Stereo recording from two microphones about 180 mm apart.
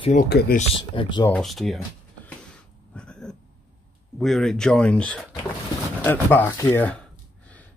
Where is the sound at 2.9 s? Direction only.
5° left (ahead or behind).